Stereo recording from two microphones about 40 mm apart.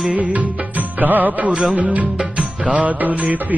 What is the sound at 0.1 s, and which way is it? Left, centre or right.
Music, right.